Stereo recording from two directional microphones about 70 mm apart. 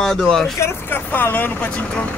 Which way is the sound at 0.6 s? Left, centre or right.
Left.